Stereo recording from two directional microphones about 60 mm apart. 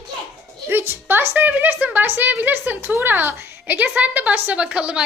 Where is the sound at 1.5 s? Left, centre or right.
Right.